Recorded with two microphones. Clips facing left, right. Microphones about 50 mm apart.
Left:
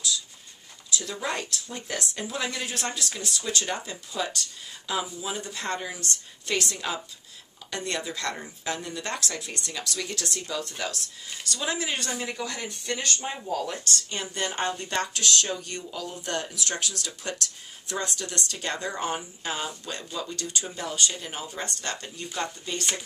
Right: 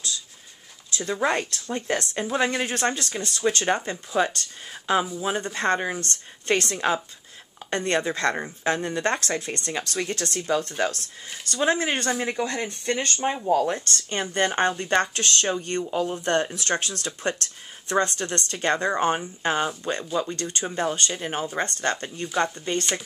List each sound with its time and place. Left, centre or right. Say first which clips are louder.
0.9 s speech: right 7 dB; right
13.8 s speech: right 3 dB; right